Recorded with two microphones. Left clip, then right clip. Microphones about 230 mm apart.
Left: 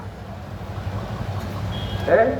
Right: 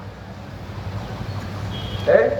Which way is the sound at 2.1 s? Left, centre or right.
Right.